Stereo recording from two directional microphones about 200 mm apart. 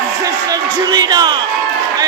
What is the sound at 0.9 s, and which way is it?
Speech, 20° right (ahead or behind).